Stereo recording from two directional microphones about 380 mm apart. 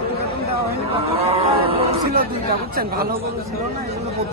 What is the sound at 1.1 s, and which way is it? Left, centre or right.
Speech, centre.